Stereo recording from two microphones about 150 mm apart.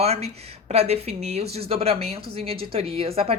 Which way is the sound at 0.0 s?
45° right (ahead or behind).